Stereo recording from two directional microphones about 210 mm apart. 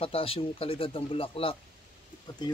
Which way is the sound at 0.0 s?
25° left (ahead or behind).